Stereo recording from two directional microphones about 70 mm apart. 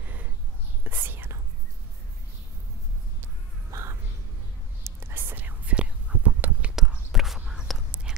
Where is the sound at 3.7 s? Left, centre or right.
Right.